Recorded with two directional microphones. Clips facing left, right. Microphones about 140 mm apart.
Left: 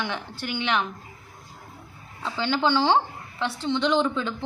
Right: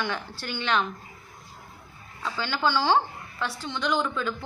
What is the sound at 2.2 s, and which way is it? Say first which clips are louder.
A woman's voice: left 3 dB; 20° left (ahead or behind).